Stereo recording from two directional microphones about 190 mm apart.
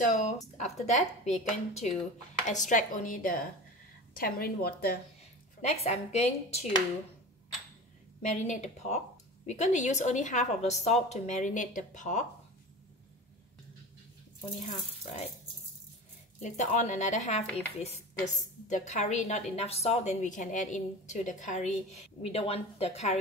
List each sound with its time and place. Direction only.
0.0 s a woman's voice: 40° left (ahead or behind)
5.6 s a woman's voice: 35° left (ahead or behind)
8.2 s a woman's voice: 40° left (ahead or behind)
16.3 s a woman's voice: 40° left (ahead or behind)